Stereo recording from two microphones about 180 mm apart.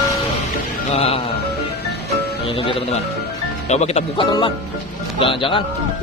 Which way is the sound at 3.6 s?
35° left (ahead or behind).